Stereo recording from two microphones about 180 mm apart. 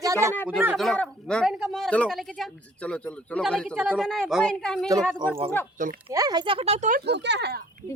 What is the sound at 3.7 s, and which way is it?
Speech, 10° right (ahead or behind).